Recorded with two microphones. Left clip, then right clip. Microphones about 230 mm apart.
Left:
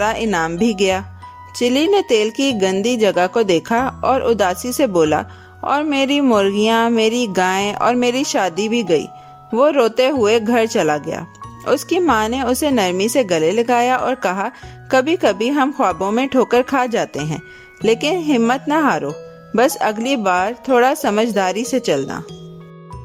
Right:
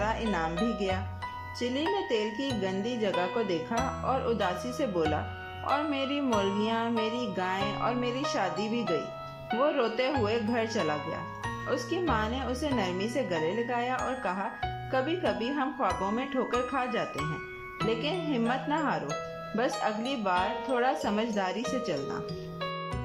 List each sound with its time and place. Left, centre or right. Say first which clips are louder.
0.0 s a woman's voice: left 12 dB; left